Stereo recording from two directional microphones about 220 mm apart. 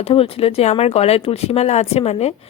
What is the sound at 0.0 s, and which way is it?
Speech, 25° left (ahead or behind).